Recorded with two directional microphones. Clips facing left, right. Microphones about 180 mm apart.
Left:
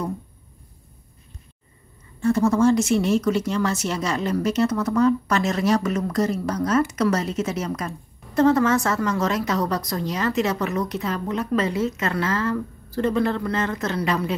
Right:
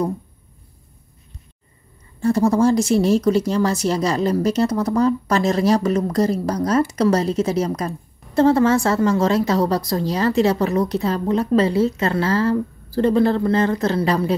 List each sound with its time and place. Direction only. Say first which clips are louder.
2.1 s a woman's voice: right 2 dB; 35° right (ahead or behind)